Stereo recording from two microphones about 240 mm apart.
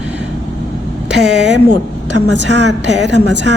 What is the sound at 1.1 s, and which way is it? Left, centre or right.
A woman's voice, right.